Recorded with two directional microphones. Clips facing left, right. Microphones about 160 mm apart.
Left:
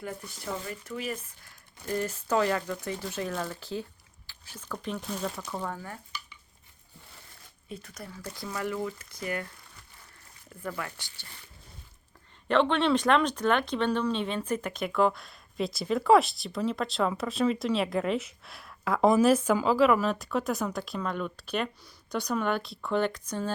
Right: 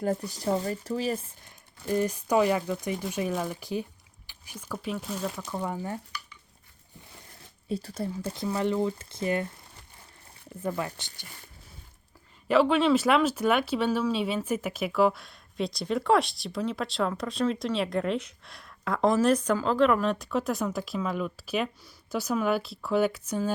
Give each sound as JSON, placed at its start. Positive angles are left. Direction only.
{"t": 0.0, "sound": "speech", "side_deg": -40}
{"t": 1.5, "sound": "speech", "side_deg": -15}
{"t": 7.7, "sound": "speech", "side_deg": -35}
{"t": 10.6, "sound": "speech", "side_deg": -20}
{"t": 12.5, "sound": "speech", "side_deg": -5}